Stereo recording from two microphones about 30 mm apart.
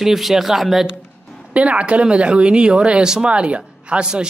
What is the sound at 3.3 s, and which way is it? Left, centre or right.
Speech, right.